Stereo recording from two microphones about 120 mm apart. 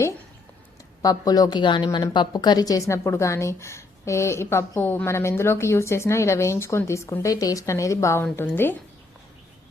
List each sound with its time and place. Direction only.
1.0 s a woman's voice: 30° left (ahead or behind)